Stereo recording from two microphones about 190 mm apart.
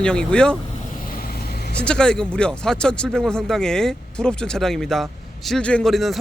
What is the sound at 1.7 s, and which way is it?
Speech, 5° left (ahead or behind).